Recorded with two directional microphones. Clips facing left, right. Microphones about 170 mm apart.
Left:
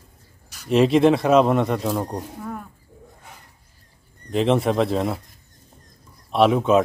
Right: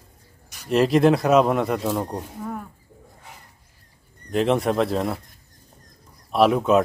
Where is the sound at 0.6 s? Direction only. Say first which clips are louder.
Left 1 dB; centre (ahead or behind).